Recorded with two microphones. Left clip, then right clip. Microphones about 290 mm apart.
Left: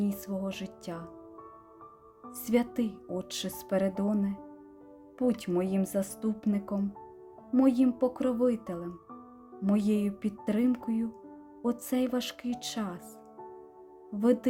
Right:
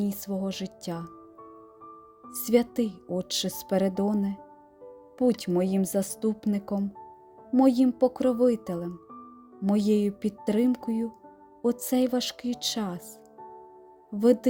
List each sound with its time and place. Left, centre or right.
0.0 s speech: centre
2.3 s speech: centre